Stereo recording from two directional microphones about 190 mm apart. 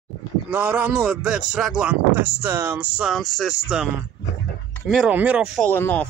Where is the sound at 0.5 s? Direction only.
10° right (ahead or behind).